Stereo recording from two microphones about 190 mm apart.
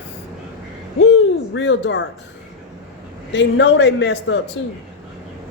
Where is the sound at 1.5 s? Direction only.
70° left (ahead or behind).